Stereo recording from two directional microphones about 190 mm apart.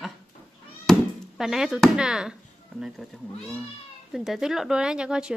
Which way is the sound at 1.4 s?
5° right (ahead or behind).